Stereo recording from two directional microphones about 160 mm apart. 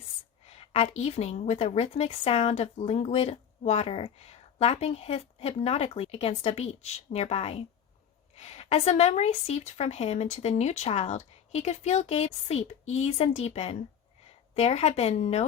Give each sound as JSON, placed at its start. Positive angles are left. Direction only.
{"t": 0.4, "sound": "a woman's voice", "side_deg": 40}